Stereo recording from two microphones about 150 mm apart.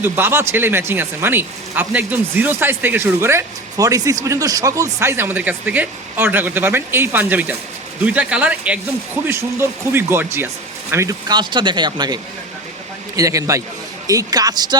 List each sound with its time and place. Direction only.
0.0 s speech: 15° right (ahead or behind)